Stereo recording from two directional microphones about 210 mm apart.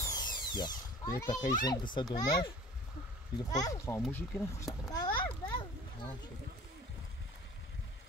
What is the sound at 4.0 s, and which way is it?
Children playing, 10° left (ahead or behind).